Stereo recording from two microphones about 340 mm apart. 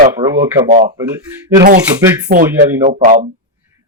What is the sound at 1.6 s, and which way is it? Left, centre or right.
Cutlery, right.